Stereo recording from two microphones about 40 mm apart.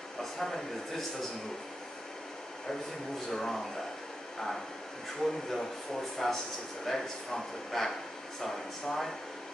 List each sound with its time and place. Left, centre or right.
0.2 s speech: centre
3.3 s speech: centre
5.2 s speech: centre